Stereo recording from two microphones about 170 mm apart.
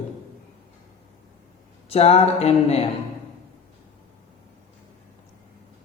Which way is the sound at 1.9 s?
35° left (ahead or behind).